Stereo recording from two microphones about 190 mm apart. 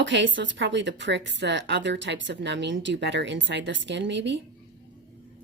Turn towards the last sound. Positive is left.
turn(degrees=-70)  # may be behind; listen again after turning